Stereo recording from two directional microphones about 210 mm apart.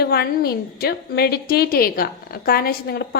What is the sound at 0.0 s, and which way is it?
A woman's voice, 45° left (ahead or behind).